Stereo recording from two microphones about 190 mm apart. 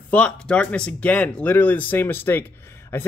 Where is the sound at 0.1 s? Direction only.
5° left (ahead or behind).